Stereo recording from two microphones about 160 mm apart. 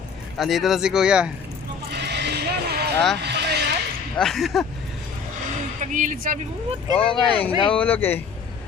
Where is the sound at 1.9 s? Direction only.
90° right.